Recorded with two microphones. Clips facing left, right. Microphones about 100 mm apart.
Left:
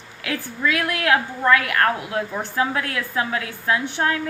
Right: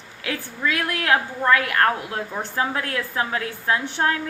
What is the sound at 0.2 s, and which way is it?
Speech, 30° right (ahead or behind).